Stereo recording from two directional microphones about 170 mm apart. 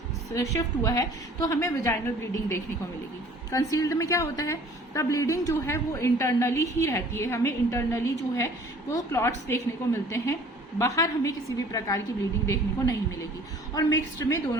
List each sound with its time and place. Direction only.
0.5 s a woman's voice: 20° left (ahead or behind)